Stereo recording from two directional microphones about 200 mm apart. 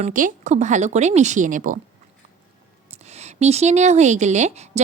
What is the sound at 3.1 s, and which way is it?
A woman's voice, 35° right (ahead or behind).